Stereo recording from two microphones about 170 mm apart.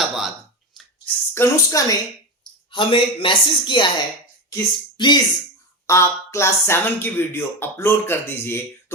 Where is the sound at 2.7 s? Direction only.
30° left (ahead or behind).